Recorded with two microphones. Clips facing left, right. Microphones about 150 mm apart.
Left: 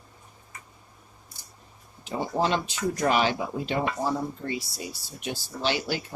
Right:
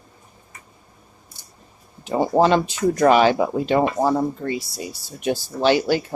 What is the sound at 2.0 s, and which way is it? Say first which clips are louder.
Speech: right 9 dB; 50° right (ahead or behind).